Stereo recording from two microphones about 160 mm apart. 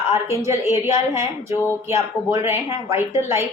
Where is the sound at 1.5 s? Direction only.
15° left (ahead or behind).